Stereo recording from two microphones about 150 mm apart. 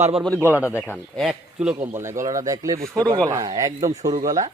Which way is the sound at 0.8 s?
15° left (ahead or behind).